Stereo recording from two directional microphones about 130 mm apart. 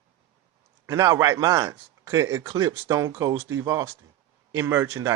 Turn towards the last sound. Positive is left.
turn(degrees=-20)  # may be behind; listen again after turning